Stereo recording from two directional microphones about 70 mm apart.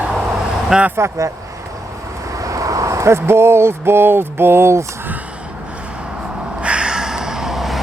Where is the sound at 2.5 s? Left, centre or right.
Right.